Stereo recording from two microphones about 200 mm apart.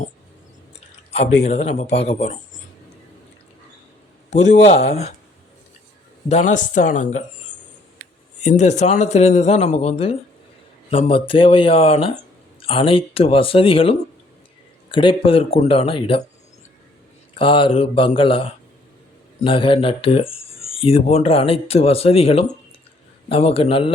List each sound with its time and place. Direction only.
1.1 s speech: 30° left (ahead or behind)
4.3 s speech: 35° left (ahead or behind)
6.2 s speech: 35° left (ahead or behind)
8.4 s speech: 35° left (ahead or behind)
17.3 s speech: 25° left (ahead or behind)